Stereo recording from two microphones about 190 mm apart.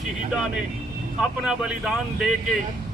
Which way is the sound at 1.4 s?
5° right (ahead or behind).